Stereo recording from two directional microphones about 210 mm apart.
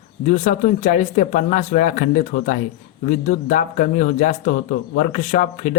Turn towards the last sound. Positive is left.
turn(degrees=40)  # may be behind; listen again after turning